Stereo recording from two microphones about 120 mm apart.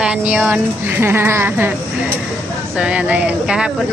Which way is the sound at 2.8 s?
10° right (ahead or behind).